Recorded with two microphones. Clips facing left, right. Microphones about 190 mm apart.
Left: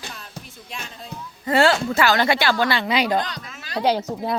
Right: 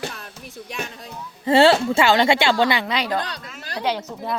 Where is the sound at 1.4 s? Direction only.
30° right (ahead or behind).